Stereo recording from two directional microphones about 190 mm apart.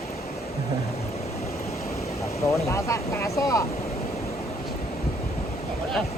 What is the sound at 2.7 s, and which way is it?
Speech, 15° left (ahead or behind).